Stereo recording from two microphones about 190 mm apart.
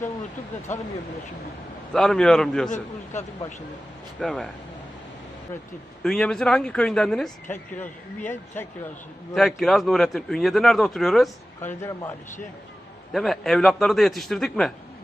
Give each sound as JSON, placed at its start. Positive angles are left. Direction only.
{"t": 1.9, "sound": "speech", "side_deg": 5}
{"t": 2.6, "sound": "a man's voice", "side_deg": 40}
{"t": 4.2, "sound": "speech", "side_deg": 5}
{"t": 6.0, "sound": "speech", "side_deg": 5}
{"t": 11.8, "sound": "a man's voice", "side_deg": 15}
{"t": 13.1, "sound": "speech", "side_deg": 0}